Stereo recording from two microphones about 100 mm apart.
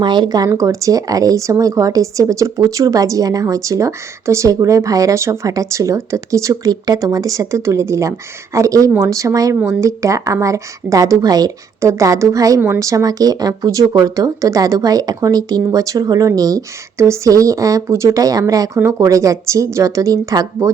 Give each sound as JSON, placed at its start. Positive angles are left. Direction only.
{"t": 0.0, "sound": "speech", "side_deg": -50}
{"t": 12.5, "sound": "speech", "side_deg": -25}